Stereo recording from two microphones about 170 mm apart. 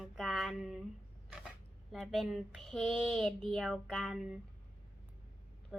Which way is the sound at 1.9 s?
Centre (ahead or behind).